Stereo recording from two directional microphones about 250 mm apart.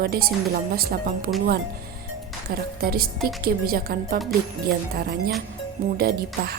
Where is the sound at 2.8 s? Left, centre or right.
Right.